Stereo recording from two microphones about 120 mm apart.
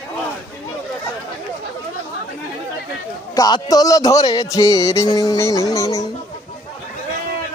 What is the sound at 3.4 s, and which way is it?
Music, 30° left (ahead or behind).